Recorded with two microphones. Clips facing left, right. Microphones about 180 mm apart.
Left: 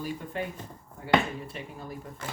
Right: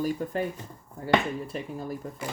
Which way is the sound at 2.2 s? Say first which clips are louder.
Right 3 dB; 10° right (ahead or behind).